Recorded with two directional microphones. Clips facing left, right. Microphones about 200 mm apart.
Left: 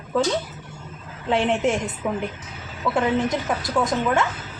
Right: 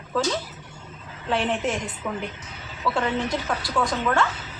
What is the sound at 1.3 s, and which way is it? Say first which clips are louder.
Speech: left 4 dB; 25° left (ahead or behind).